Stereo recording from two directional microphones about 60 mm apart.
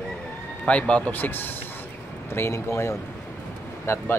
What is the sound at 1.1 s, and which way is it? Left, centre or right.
Speech, left.